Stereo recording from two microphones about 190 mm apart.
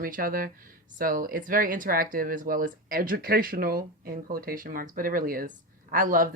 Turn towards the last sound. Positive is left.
turn(degrees=-45)  # may be behind; listen again after turning